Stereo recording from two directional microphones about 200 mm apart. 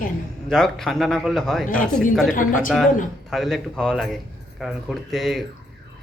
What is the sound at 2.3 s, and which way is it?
Speech, 45° left (ahead or behind).